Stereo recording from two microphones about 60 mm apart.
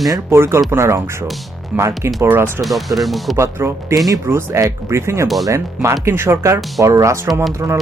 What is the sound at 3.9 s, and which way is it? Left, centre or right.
Speech, right.